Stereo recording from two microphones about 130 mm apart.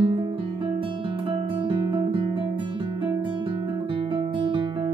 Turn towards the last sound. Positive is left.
turn(degrees=-40)  # may be behind; listen again after turning